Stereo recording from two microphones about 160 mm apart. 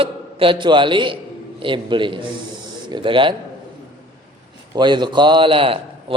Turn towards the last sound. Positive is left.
turn(degrees=-35)  # may be behind; listen again after turning